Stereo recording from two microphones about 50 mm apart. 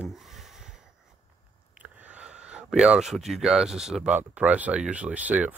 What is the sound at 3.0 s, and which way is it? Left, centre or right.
Speech, centre.